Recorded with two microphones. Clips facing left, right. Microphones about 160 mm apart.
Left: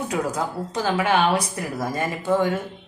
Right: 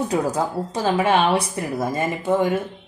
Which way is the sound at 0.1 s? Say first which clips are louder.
Right 3 dB; 30° right (ahead or behind).